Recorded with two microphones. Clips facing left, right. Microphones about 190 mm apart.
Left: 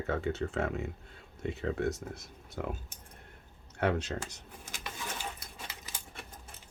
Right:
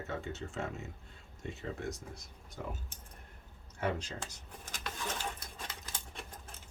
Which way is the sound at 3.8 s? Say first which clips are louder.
Left 5 dB; 65° left (ahead or behind).